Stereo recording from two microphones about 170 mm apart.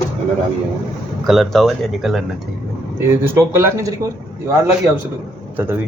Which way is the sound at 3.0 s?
15° right (ahead or behind).